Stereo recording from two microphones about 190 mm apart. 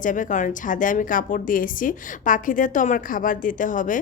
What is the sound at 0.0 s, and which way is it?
A woman's voice, 45° left (ahead or behind).